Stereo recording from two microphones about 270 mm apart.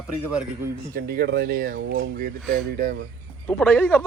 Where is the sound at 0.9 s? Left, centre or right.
Right.